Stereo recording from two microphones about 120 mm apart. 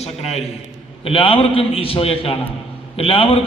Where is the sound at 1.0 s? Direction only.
50° left (ahead or behind).